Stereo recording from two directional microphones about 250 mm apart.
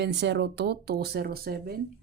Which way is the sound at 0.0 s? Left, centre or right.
Right.